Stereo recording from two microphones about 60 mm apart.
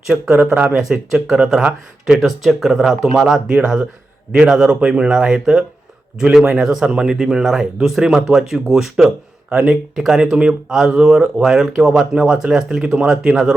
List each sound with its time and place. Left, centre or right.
0.3 s speech: right
0.8 s speech: centre